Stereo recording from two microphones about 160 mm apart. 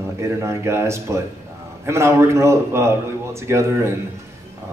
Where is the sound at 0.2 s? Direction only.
15° right (ahead or behind).